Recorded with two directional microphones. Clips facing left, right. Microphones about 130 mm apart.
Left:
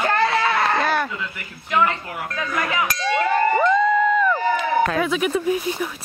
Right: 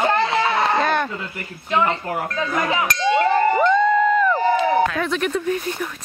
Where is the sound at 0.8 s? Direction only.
5° left (ahead or behind).